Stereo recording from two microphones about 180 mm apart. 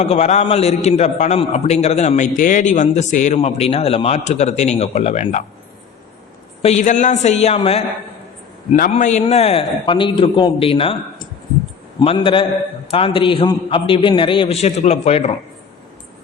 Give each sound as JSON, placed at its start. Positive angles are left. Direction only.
{"t": 0.0, "sound": "a man's voice", "side_deg": 35}
{"t": 6.6, "sound": "a man's voice", "side_deg": 40}
{"t": 8.9, "sound": "a man's voice", "side_deg": 40}